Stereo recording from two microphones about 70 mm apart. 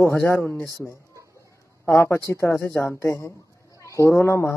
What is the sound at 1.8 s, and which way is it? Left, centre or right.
Speech, left.